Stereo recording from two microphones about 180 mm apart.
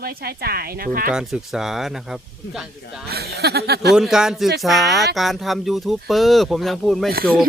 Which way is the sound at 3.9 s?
5° right (ahead or behind).